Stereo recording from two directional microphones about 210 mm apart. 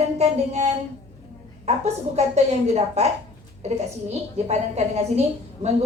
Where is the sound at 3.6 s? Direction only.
30° right (ahead or behind).